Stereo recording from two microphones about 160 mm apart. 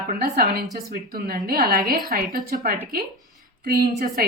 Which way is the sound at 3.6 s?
75° right (ahead or behind).